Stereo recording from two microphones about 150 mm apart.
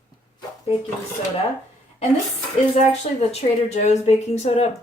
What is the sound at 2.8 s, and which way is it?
A woman's voice, 45° left (ahead or behind).